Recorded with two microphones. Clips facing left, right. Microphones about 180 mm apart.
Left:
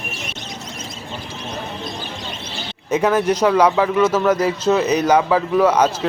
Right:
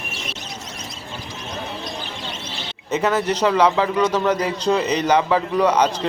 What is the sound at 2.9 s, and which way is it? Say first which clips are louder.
A man's voice: left 3 dB; 10° left (ahead or behind).